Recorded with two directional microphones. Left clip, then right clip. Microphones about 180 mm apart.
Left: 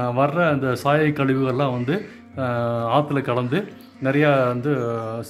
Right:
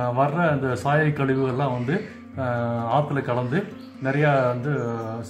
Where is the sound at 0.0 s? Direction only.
50° left (ahead or behind).